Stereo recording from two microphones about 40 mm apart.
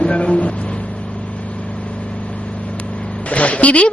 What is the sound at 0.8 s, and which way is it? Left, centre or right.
Vehicle, left.